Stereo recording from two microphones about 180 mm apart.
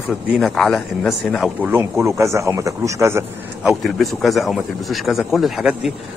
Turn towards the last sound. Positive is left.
turn(degrees=0)  # may be behind; listen again after turning